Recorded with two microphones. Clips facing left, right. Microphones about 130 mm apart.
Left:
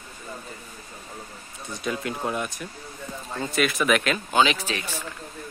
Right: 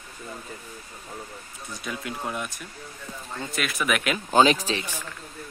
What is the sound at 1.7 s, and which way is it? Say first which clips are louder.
Speech: left 5 dB; centre (ahead or behind).